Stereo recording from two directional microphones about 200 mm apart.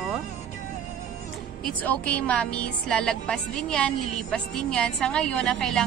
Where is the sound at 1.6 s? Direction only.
5° left (ahead or behind).